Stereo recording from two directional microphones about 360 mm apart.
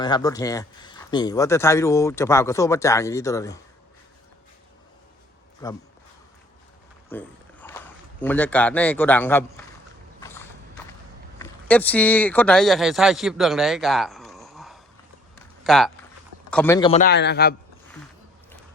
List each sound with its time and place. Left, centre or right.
0.0 s speech: centre
5.6 s speech: centre
7.1 s a man's voice: centre
10.2 s a sound: centre
11.3 s a man's voice: centre; by 17.5 s left